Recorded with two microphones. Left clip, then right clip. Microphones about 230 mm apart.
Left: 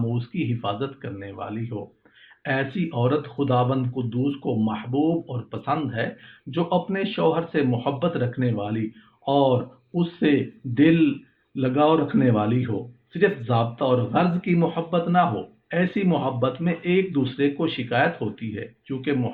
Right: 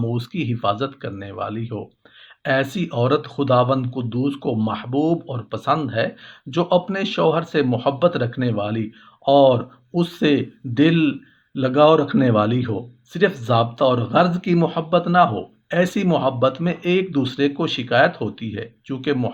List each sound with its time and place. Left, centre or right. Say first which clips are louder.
0.1 s speech: right 3 dB; right